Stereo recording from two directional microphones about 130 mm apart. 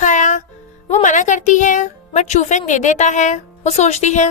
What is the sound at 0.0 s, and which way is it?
Music, 70° left (ahead or behind).